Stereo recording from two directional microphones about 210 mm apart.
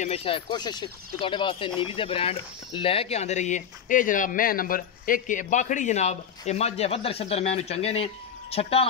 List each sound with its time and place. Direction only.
0.0 s speech: 25° left (ahead or behind)